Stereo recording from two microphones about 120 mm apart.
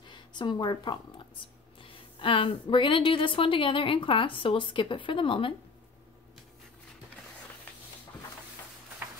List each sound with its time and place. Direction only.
0.0 s a woman's voice: 40° left (ahead or behind)